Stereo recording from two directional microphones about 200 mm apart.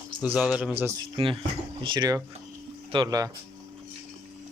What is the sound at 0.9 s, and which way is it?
Speech, 25° right (ahead or behind).